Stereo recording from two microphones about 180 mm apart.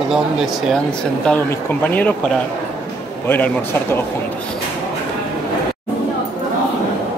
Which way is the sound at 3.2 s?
10° left (ahead or behind).